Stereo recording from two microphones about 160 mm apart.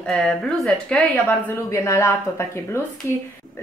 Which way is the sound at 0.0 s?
5° left (ahead or behind).